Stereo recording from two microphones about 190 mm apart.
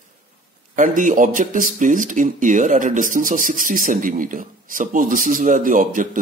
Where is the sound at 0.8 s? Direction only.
45° right (ahead or behind).